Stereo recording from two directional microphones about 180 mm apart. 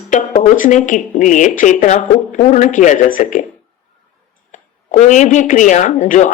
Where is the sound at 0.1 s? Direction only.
45° left (ahead or behind).